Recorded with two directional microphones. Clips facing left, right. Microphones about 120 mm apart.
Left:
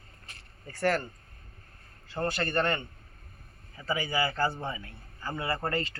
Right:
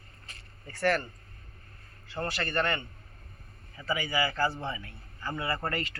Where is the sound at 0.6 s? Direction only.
15° left (ahead or behind).